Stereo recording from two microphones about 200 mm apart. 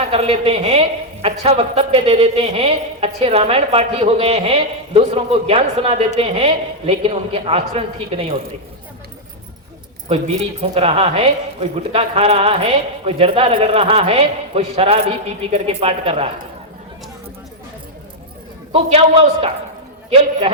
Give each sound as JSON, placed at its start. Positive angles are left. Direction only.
{"t": 0.0, "sound": "a man's voice", "side_deg": -30}
{"t": 10.6, "sound": "a man's voice", "side_deg": -30}
{"t": 18.7, "sound": "a man's voice", "side_deg": -30}